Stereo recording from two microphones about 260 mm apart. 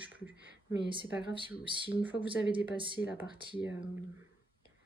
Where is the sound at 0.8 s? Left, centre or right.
Centre.